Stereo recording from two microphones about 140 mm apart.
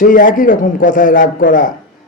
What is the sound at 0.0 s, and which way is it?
A man's voice, 75° left (ahead or behind).